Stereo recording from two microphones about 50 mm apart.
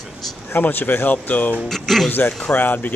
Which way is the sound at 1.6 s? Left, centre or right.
Centre.